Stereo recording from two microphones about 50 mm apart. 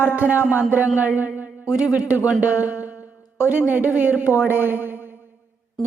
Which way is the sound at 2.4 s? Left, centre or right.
Right.